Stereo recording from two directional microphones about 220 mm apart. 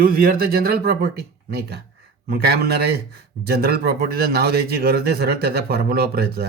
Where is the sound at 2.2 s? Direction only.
45° right (ahead or behind).